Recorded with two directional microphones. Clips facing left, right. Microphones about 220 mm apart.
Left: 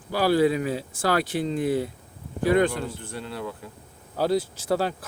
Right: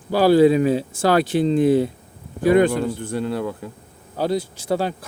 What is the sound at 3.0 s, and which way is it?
Speech, 45° right (ahead or behind).